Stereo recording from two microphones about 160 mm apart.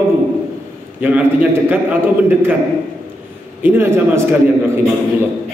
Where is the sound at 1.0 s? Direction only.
10° right (ahead or behind).